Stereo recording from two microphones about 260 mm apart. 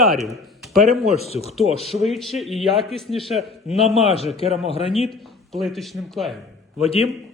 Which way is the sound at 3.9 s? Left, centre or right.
Left.